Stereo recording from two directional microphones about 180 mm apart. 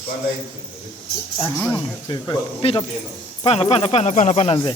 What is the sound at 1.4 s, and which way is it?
Speech, 10° left (ahead or behind).